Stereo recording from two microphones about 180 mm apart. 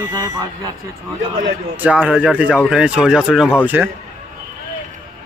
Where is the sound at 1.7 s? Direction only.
10° right (ahead or behind).